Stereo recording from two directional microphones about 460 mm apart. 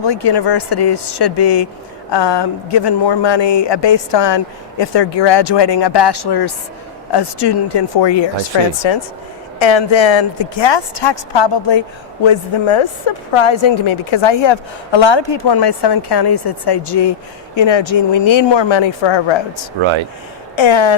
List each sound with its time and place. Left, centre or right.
0.0 s speech: left
8.8 s a woman's voice: left
12.2 s a woman's voice: left
17.5 s a woman's voice: left
19.8 s speech: right
20.6 s speech: left